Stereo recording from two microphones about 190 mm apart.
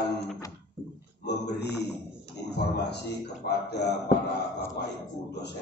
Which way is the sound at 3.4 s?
60° left (ahead or behind).